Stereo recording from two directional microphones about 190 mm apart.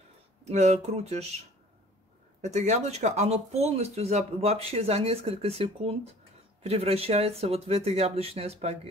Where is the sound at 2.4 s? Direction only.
35° right (ahead or behind).